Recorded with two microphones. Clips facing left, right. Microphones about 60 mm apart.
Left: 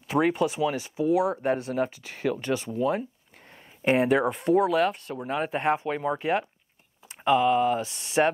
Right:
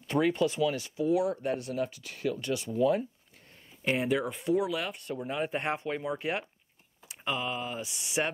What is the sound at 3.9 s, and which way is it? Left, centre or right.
Speech, left.